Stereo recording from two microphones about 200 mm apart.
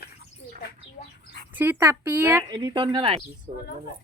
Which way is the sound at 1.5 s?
10° right (ahead or behind).